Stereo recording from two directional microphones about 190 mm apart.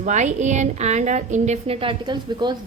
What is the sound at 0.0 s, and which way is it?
A woman's voice, 40° right (ahead or behind).